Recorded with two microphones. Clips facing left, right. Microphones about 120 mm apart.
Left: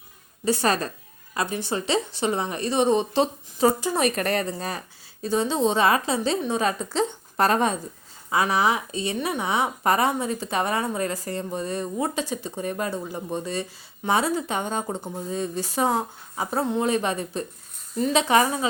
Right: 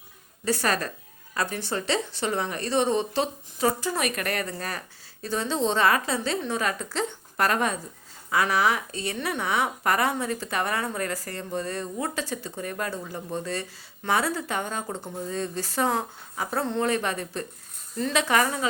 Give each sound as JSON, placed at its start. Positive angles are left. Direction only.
{"t": 0.4, "sound": "speech", "side_deg": 20}